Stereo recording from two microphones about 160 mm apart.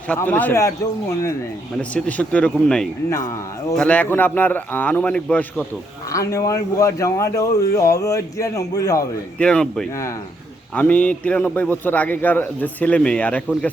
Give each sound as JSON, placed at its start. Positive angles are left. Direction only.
{"t": 0.1, "sound": "a man's voice", "side_deg": 10}
{"t": 1.8, "sound": "a man's voice", "side_deg": 10}
{"t": 6.1, "sound": "a man's voice", "side_deg": 20}
{"t": 9.4, "sound": "speech", "side_deg": 5}
{"t": 9.9, "sound": "a man's voice", "side_deg": 20}